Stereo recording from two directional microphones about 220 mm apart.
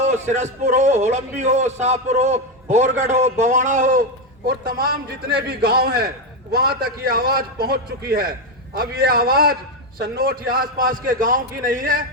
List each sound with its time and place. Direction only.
0.0 s a man's voice: 30° right (ahead or behind)